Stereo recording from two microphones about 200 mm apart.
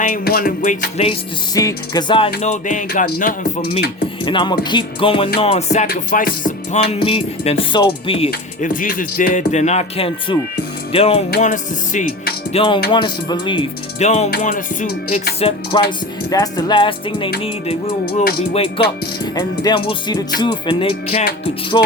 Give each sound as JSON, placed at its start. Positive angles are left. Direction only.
{"t": 0.1, "sound": "music", "side_deg": 45}
{"t": 1.5, "sound": "music", "side_deg": 20}
{"t": 4.3, "sound": "speech", "side_deg": 25}
{"t": 5.4, "sound": "music", "side_deg": 30}
{"t": 8.3, "sound": "music", "side_deg": 40}
{"t": 10.9, "sound": "speech", "side_deg": 30}
{"t": 11.3, "sound": "music", "side_deg": 40}
{"t": 12.9, "sound": "speech", "side_deg": 25}
{"t": 14.3, "sound": "music", "side_deg": 50}
{"t": 15.4, "sound": "speech", "side_deg": 30}